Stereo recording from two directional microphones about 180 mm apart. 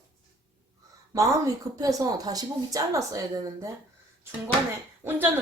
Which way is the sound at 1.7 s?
20° right (ahead or behind).